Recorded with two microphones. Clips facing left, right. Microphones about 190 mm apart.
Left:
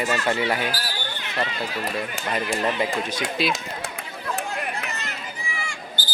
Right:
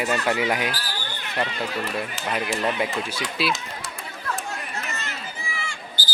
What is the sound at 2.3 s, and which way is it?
Speech, 5° right (ahead or behind).